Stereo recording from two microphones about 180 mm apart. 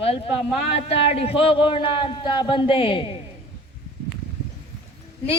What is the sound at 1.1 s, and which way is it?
Speech, 35° left (ahead or behind).